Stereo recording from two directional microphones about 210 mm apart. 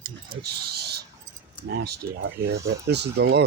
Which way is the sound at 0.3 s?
50° right (ahead or behind).